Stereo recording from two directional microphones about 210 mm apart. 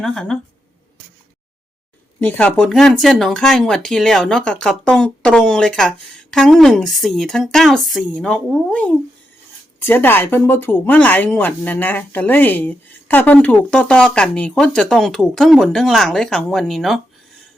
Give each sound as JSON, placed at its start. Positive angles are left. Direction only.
{"t": 0.0, "sound": "speech", "side_deg": 0}
{"t": 2.2, "sound": "speech", "side_deg": 5}